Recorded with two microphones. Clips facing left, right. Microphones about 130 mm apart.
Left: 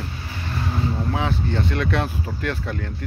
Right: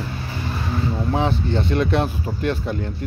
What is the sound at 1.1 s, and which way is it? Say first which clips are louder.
Speech: right 3 dB; 25° right (ahead or behind).